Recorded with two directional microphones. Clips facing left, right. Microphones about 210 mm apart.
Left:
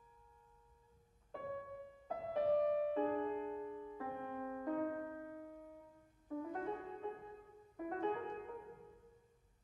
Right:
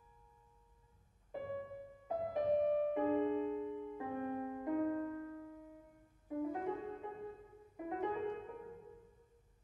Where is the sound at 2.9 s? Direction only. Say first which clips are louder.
Right 3 dB; 15° right (ahead or behind).